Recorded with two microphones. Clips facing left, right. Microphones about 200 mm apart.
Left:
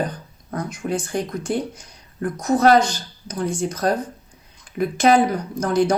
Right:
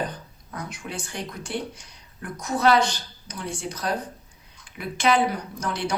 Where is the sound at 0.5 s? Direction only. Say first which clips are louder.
Left 9 dB; 45° left (ahead or behind).